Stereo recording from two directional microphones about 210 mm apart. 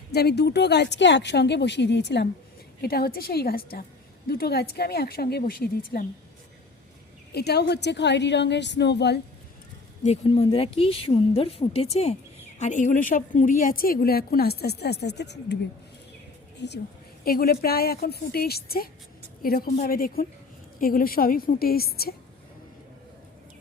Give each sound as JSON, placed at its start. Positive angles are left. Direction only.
{"t": 0.1, "sound": "a woman's voice", "side_deg": 50}
{"t": 7.3, "sound": "a woman's voice", "side_deg": 50}
{"t": 10.0, "sound": "a woman's voice", "side_deg": 30}
{"t": 16.6, "sound": "a woman's voice", "side_deg": 55}